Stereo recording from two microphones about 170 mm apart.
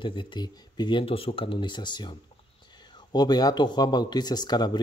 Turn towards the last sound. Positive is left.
turn(degrees=25)  # may be behind; listen again after turning